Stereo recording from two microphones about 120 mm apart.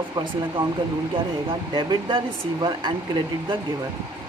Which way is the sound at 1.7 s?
40° right (ahead or behind).